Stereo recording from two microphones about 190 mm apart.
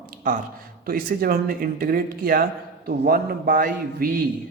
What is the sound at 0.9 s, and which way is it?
A man's voice, 50° right (ahead or behind).